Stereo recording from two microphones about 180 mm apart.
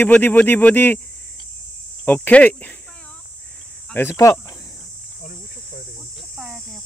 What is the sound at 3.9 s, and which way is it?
Speech, 10° left (ahead or behind).